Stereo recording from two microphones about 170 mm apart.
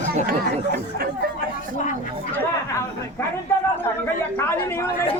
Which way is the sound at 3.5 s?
15° left (ahead or behind).